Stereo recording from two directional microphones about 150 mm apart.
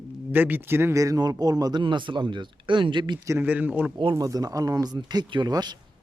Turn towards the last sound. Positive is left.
turn(degrees=-25)  # may be behind; listen again after turning